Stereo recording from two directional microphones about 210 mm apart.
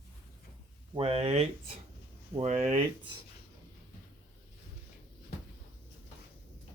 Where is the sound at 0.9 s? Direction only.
25° right (ahead or behind).